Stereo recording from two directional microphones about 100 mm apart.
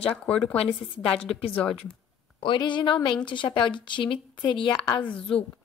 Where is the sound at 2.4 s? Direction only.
55° left (ahead or behind).